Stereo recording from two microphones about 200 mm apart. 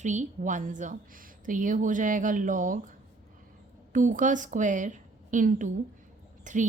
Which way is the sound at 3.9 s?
40° right (ahead or behind).